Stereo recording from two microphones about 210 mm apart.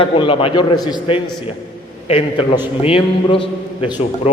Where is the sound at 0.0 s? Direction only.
25° left (ahead or behind).